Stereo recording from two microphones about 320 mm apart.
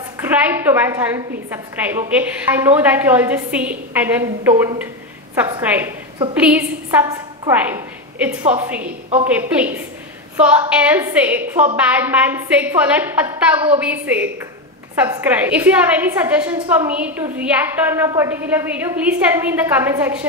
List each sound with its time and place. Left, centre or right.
0.2 s a woman's voice: centre